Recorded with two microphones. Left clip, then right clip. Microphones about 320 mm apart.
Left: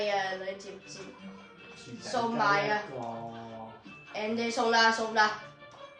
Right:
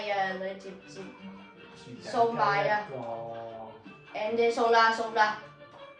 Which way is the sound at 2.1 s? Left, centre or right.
Left.